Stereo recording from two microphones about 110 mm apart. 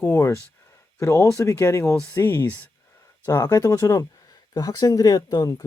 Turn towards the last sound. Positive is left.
turn(degrees=35)  # may be behind; listen again after turning